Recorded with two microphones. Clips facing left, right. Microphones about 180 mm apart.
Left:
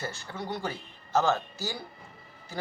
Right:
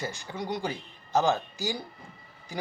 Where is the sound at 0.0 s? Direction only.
15° right (ahead or behind).